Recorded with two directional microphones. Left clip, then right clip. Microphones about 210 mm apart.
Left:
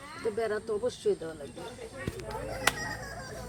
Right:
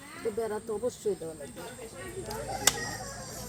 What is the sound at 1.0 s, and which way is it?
Speech, 10° left (ahead or behind).